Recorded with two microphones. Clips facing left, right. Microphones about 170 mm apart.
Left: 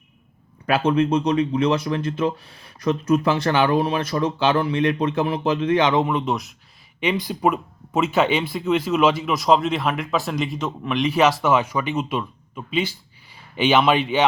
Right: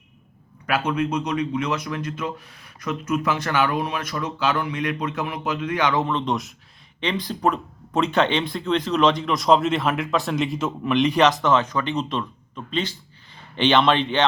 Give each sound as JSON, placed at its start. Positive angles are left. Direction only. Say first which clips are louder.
{"t": 0.7, "sound": "speech", "louder": "left 5 dB", "side_deg": 30}